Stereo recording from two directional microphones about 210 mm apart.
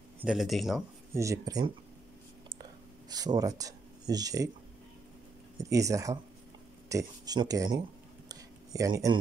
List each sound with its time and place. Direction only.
0.2 s speech: 5° right (ahead or behind)
1.1 s speech: 15° right (ahead or behind)
3.1 s speech: 20° right (ahead or behind)
5.6 s speech: 15° right (ahead or behind)
8.3 s a sound: 15° right (ahead or behind)